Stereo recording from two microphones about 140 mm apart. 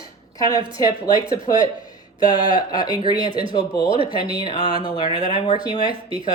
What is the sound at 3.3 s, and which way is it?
Speech, 40° right (ahead or behind).